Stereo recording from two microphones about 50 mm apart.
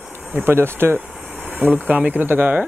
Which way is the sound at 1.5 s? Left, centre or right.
Right.